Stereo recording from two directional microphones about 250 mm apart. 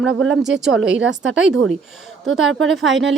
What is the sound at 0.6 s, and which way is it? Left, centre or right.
Speech, centre.